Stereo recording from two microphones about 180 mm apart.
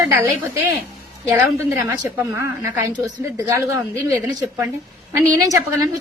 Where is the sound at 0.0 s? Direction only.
15° right (ahead or behind).